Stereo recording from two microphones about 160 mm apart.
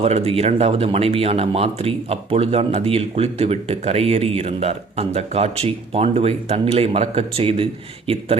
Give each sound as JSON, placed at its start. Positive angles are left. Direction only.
{"t": 0.0, "sound": "speech", "side_deg": -40}